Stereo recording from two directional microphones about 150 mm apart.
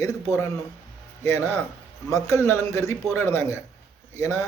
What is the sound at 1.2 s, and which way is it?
Speech, 20° left (ahead or behind).